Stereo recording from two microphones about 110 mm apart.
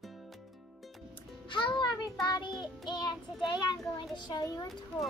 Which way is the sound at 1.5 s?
50° left (ahead or behind).